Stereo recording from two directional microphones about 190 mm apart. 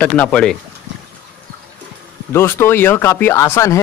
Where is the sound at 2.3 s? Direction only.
10° left (ahead or behind).